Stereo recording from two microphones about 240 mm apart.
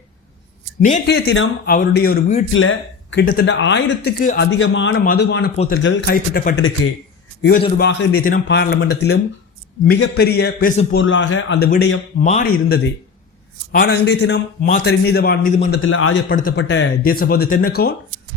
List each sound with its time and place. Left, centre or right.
0.8 s a man's voice: left
2.5 s speech: left
4.2 s a man's voice: left
4.5 s speech: left
5.5 s a man's voice: left
5.8 s a man's voice: left
7.8 s speech: left
8.2 s a man's voice: left
10.9 s speech: left
12.2 s a man's voice: left
15.7 s a man's voice: left
16.3 s a man's voice: left